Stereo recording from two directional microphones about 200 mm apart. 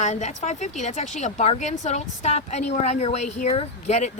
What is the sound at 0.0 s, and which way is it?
Speech, 35° left (ahead or behind).